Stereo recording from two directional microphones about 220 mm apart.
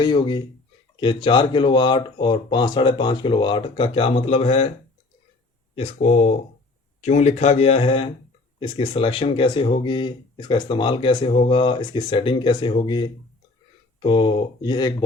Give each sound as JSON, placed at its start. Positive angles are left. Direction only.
{"t": 0.0, "sound": "speech", "side_deg": 20}
{"t": 5.7, "sound": "speech", "side_deg": 25}